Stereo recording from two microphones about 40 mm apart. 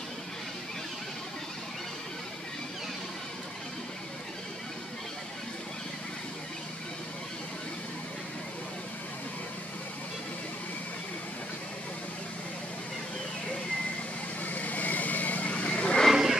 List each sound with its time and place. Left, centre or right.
14.4 s vehicle: left
16.1 s vehicle: centre